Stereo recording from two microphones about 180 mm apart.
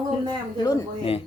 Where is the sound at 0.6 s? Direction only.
25° left (ahead or behind).